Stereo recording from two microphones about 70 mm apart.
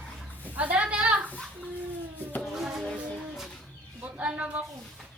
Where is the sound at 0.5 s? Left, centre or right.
Right.